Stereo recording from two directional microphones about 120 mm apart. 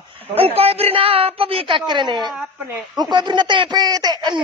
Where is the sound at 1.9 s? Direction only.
40° right (ahead or behind).